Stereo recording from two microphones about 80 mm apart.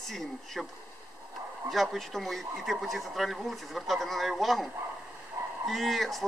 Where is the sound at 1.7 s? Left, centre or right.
Centre.